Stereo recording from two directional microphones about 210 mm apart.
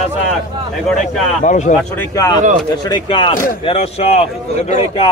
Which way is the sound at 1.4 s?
35° left (ahead or behind).